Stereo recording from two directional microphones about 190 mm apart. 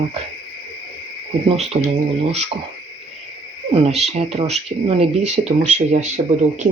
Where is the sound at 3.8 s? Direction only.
35° right (ahead or behind).